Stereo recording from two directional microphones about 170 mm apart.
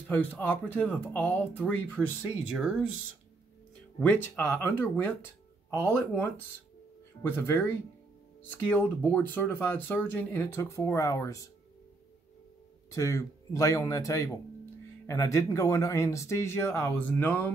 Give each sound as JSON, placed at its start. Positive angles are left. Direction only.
{"t": 0.1, "sound": "speech", "side_deg": 10}
{"t": 2.5, "sound": "speech", "side_deg": 0}
{"t": 4.0, "sound": "speech", "side_deg": 10}
{"t": 5.7, "sound": "speech", "side_deg": -10}
{"t": 7.2, "sound": "speech", "side_deg": 15}
{"t": 12.9, "sound": "speech", "side_deg": 20}